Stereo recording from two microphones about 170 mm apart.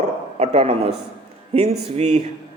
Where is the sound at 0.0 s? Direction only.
40° right (ahead or behind).